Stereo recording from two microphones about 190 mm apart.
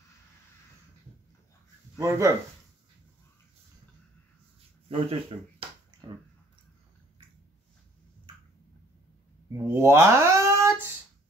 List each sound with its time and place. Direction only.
2.0 s speech: 15° right (ahead or behind)
4.8 s a sound: 30° right (ahead or behind)
9.5 s speech: 15° right (ahead or behind)